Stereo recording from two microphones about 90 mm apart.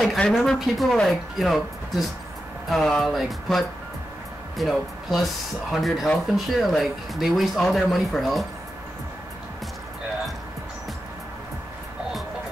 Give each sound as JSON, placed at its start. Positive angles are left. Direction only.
{"t": 0.0, "sound": "speech", "side_deg": 5}